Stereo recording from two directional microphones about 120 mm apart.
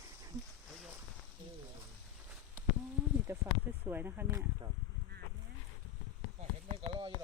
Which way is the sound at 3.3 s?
20° right (ahead or behind).